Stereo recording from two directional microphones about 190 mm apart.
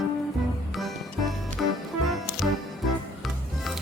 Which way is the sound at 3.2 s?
Centre (ahead or behind).